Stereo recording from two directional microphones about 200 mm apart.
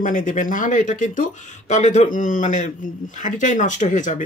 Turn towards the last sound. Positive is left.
turn(degrees=40)  # may be behind; listen again after turning